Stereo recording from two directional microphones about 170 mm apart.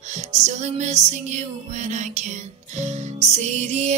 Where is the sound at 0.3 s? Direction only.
45° right (ahead or behind).